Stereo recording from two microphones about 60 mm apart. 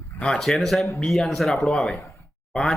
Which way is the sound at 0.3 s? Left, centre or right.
Centre.